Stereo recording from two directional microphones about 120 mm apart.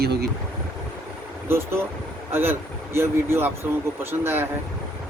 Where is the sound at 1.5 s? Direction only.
20° right (ahead or behind).